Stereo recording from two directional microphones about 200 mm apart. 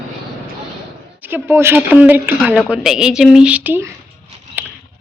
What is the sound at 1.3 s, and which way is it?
A woman's voice, 10° right (ahead or behind).